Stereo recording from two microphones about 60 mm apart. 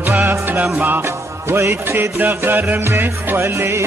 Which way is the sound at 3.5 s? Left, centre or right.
Right.